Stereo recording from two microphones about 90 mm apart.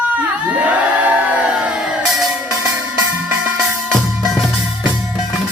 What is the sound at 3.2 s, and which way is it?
Music, 20° right (ahead or behind).